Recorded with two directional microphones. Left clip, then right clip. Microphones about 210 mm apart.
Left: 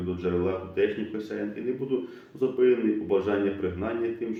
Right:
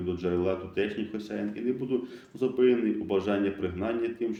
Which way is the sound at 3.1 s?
40° right (ahead or behind).